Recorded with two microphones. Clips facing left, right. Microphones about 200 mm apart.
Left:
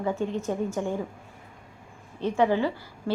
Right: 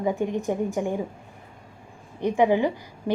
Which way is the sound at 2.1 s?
15° right (ahead or behind).